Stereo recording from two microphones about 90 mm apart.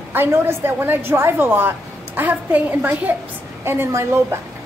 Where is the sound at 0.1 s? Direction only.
25° right (ahead or behind).